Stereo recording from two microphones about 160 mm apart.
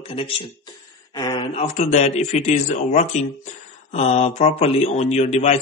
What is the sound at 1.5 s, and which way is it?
Speech, 45° left (ahead or behind).